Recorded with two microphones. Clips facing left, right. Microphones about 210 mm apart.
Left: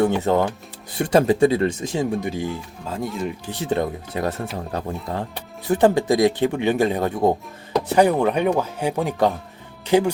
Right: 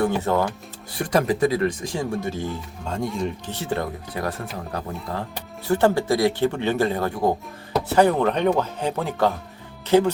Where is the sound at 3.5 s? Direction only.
20° left (ahead or behind).